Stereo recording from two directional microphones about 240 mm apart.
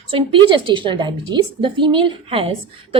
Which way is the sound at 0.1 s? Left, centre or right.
Right.